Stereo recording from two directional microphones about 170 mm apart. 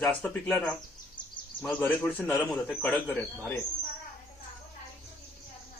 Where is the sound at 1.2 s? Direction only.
25° left (ahead or behind).